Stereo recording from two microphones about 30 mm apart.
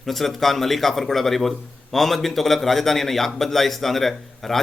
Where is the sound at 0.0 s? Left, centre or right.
Centre.